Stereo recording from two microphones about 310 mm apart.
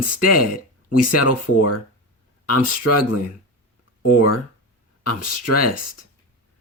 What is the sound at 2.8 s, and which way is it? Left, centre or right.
Speech, left.